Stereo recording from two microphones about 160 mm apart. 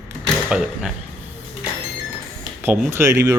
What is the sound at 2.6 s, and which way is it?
Speech, 10° right (ahead or behind).